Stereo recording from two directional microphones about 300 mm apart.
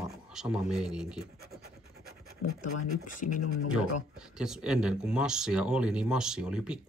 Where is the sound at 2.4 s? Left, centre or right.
Left.